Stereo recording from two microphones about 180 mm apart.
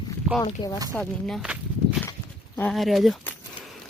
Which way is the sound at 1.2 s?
Centre (ahead or behind).